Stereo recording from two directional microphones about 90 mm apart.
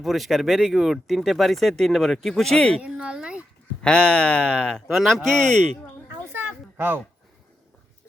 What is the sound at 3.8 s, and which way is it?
Speech, 10° left (ahead or behind).